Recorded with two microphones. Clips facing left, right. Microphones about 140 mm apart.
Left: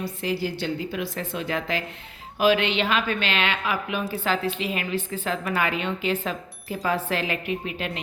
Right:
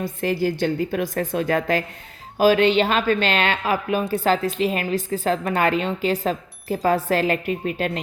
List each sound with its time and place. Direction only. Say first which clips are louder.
0.0 s a woman's voice: right 5 dB; 50° right (ahead or behind)